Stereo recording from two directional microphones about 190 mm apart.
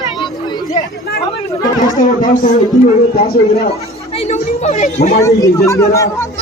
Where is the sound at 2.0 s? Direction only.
45° left (ahead or behind).